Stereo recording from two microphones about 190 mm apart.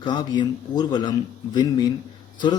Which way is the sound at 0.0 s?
20° left (ahead or behind).